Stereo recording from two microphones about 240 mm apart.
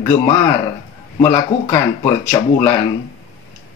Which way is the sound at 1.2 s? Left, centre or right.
Centre.